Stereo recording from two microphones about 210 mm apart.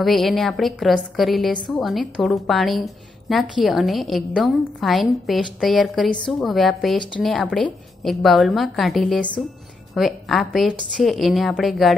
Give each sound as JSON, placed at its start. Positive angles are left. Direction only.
{"t": 0.0, "sound": "a woman's voice", "side_deg": 0}